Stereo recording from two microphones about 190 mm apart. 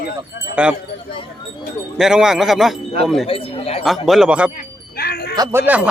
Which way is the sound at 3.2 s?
30° left (ahead or behind).